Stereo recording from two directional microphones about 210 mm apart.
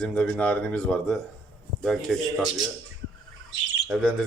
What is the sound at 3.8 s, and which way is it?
Speech, centre (ahead or behind).